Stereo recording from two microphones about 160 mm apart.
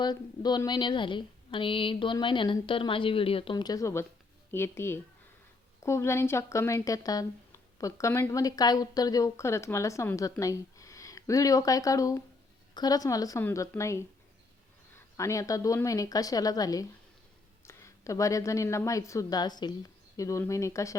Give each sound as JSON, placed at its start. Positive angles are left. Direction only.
{"t": 0.0, "sound": "speech", "side_deg": 25}